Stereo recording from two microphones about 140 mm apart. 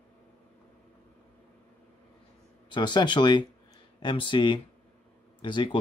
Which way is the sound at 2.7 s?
30° left (ahead or behind).